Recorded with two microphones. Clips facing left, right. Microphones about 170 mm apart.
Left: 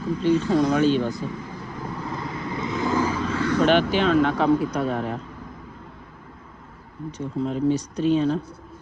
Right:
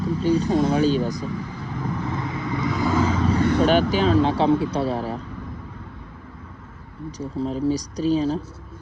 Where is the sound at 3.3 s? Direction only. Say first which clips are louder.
Right 1 dB; 35° right (ahead or behind).